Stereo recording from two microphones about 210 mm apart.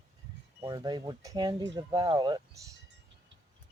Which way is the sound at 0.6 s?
20° right (ahead or behind).